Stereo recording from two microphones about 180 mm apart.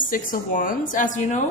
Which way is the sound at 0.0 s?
50° left (ahead or behind).